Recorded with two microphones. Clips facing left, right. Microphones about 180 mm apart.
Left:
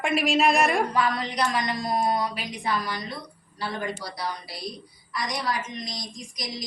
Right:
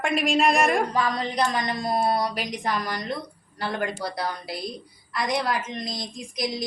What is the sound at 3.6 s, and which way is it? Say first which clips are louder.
A woman's voice: right 3 dB; 60° right (ahead or behind).